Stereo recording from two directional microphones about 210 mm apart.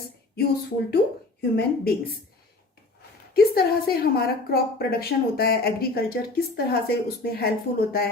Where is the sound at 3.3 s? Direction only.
50° left (ahead or behind).